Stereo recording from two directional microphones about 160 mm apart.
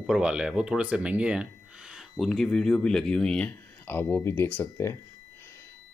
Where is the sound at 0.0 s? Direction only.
5° right (ahead or behind).